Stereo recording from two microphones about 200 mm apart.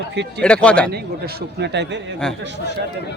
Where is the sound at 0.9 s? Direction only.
50° right (ahead or behind).